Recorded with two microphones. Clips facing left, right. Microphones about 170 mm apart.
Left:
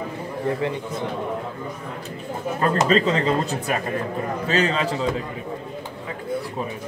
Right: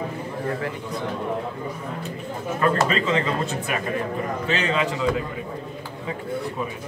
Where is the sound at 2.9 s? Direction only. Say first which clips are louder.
Left 4 dB; 35° left (ahead or behind).